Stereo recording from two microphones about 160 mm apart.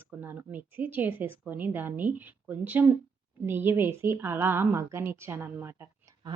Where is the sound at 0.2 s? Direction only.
10° right (ahead or behind).